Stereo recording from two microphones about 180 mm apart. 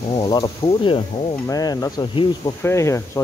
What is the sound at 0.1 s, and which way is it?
Speech, 25° left (ahead or behind).